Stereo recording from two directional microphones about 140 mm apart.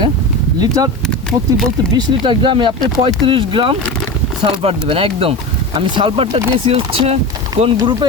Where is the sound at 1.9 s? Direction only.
35° right (ahead or behind).